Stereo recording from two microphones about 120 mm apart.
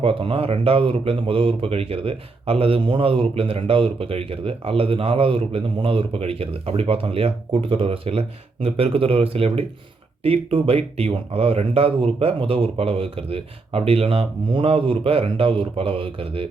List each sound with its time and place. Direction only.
0.0 s speech: 50° right (ahead or behind)